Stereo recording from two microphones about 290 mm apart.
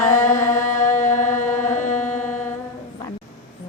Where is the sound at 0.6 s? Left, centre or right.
Centre.